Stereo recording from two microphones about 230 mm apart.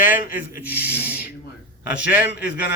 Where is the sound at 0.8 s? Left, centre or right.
Left.